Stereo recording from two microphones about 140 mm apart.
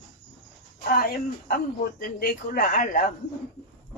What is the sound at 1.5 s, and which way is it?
Speech, 85° left.